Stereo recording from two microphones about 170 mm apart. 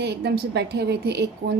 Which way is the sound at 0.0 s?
80° right.